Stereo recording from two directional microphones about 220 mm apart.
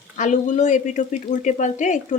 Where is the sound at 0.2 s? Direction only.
35° left (ahead or behind).